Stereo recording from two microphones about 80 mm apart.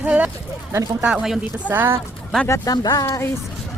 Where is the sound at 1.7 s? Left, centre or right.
Right.